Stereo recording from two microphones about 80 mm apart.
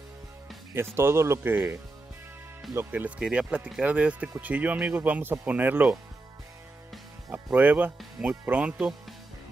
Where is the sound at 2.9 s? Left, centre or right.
Centre.